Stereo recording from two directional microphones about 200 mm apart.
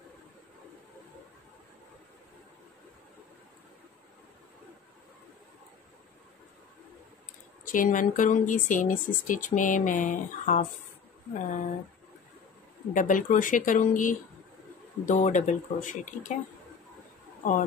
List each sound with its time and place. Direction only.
7.6 s speech: 40° left (ahead or behind)
12.9 s speech: 40° left (ahead or behind)